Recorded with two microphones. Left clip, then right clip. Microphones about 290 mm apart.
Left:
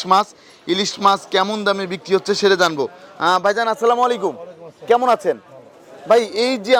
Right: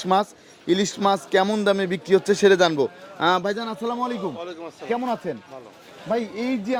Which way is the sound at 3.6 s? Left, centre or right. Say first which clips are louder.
Left 11 dB; left.